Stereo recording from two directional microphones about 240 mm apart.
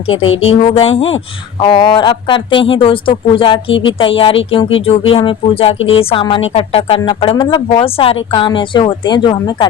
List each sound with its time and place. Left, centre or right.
0.4 s speech: left